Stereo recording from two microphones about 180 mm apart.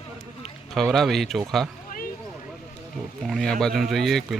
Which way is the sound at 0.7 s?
Centre (ahead or behind).